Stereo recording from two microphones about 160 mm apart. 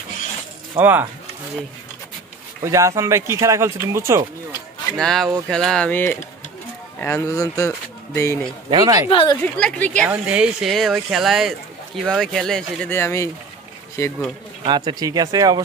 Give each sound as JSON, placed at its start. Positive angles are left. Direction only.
{"t": 0.7, "sound": "speech", "side_deg": -10}
{"t": 2.6, "sound": "speech", "side_deg": -20}
{"t": 4.9, "sound": "speech", "side_deg": 0}
{"t": 8.6, "sound": "speech", "side_deg": -25}
{"t": 9.0, "sound": "speech", "side_deg": 35}
{"t": 9.4, "sound": "speech", "side_deg": 10}
{"t": 10.0, "sound": "speech", "side_deg": -10}
{"t": 14.6, "sound": "speech", "side_deg": -30}